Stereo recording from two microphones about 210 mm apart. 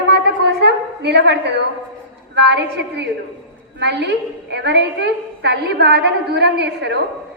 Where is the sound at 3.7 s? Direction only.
55° right (ahead or behind).